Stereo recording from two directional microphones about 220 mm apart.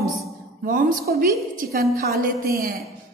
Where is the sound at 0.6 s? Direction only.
40° right (ahead or behind).